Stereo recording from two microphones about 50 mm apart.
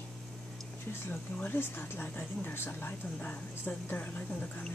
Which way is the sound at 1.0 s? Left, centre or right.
Left.